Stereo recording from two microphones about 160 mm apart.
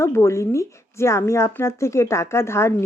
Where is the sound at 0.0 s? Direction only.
15° left (ahead or behind).